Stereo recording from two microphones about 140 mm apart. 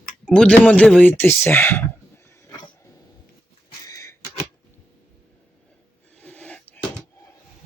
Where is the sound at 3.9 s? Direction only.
20° left (ahead or behind).